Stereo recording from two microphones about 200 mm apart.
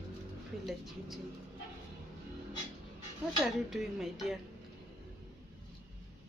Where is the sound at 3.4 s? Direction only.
Centre (ahead or behind).